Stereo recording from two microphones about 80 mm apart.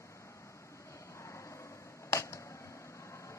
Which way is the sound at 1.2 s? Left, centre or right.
Left.